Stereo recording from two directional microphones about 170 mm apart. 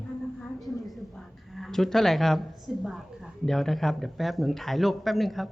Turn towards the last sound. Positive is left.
turn(degrees=0)  # may be behind; listen again after turning